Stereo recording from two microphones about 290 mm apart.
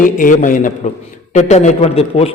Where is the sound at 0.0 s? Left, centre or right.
Left.